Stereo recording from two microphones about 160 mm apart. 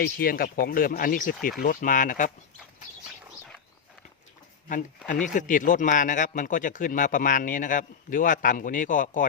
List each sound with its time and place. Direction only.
0.0 s a man's voice: 65° left (ahead or behind)
4.7 s a man's voice: 55° left (ahead or behind)